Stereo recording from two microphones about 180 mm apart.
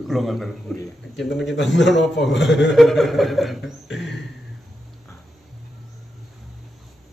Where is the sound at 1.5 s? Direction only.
85° left.